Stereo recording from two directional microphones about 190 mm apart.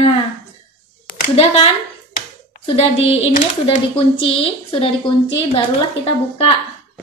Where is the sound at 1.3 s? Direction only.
30° left (ahead or behind).